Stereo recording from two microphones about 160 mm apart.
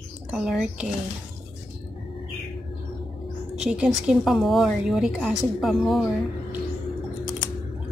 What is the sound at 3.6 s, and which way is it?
Speech, 5° right (ahead or behind).